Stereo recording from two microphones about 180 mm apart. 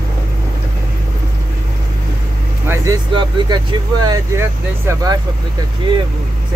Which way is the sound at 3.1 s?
25° right (ahead or behind).